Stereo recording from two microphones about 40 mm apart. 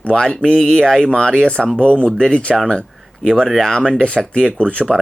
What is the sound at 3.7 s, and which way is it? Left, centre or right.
Speech, centre.